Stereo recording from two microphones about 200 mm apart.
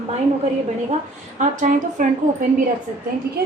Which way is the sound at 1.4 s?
40° right (ahead or behind).